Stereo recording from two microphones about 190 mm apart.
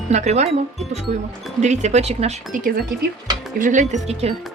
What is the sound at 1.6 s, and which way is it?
Speech, 40° right (ahead or behind).